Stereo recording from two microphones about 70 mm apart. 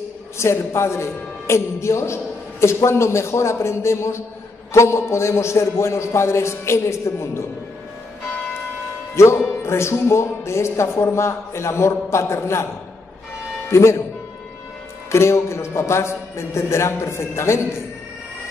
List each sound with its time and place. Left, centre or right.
0.4 s a man's voice: left
9.1 s music: left
9.6 s a man's voice: left
13.7 s speech: left
15.0 s a man's voice: left